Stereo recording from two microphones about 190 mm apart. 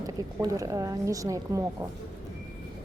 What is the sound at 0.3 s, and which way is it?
A woman's voice, 15° right (ahead or behind).